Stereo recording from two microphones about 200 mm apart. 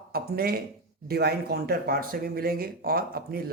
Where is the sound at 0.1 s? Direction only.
50° right (ahead or behind).